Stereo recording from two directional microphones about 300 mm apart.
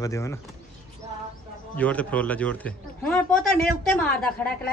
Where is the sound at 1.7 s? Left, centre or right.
Centre.